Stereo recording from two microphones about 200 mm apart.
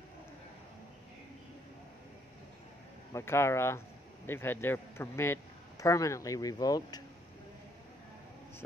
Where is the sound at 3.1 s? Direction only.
15° left (ahead or behind).